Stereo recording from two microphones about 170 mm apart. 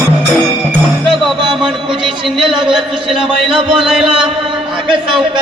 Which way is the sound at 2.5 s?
5° right (ahead or behind).